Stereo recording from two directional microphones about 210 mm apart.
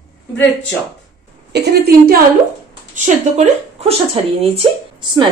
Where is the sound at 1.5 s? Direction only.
50° right (ahead or behind).